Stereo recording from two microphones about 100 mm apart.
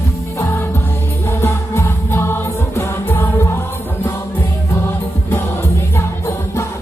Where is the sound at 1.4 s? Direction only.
25° left (ahead or behind).